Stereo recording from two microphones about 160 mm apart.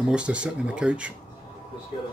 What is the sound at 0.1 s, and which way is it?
Speech, 5° right (ahead or behind).